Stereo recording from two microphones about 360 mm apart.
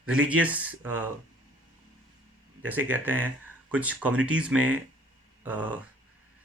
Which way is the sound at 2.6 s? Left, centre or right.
Centre.